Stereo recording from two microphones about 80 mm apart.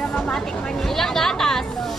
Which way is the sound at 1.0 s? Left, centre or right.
Centre.